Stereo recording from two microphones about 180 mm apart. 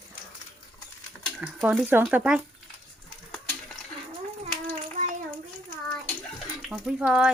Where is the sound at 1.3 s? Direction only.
5° right (ahead or behind).